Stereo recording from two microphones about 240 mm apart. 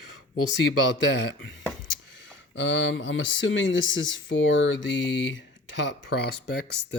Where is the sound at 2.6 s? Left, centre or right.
Left.